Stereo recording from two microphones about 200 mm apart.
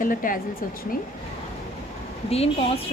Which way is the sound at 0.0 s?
45° left (ahead or behind).